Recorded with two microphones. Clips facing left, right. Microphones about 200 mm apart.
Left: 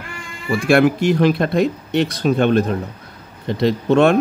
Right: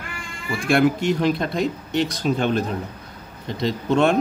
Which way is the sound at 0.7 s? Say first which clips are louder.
Left 4 dB; 65° left (ahead or behind).